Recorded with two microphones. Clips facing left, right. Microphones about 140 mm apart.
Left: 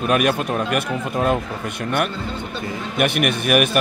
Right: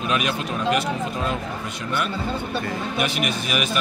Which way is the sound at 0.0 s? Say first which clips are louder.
Left 6 dB; 50° left (ahead or behind).